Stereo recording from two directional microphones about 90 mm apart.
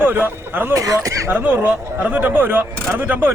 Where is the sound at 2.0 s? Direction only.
20° right (ahead or behind).